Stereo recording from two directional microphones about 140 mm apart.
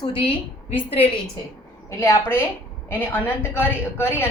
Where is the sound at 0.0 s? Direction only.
40° left (ahead or behind).